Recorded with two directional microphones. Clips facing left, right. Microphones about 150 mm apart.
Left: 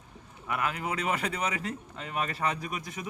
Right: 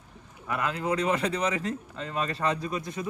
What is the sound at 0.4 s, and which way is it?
A man's voice, 10° left (ahead or behind).